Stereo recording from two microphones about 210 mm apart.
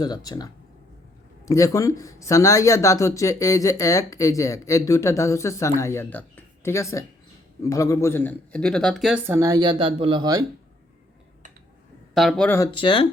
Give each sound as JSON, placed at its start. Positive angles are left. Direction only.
{"t": 0.0, "sound": "speech", "side_deg": 20}
{"t": 12.1, "sound": "speech", "side_deg": 0}
{"t": 12.5, "sound": "speech", "side_deg": 25}